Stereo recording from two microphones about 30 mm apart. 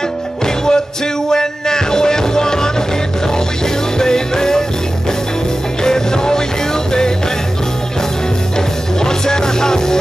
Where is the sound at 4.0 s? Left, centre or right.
Centre.